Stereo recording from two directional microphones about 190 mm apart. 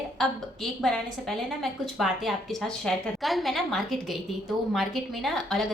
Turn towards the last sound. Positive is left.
turn(degrees=0)  # may be behind; listen again after turning